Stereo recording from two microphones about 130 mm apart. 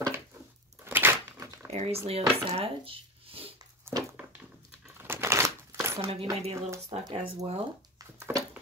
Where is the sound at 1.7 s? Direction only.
55° right (ahead or behind).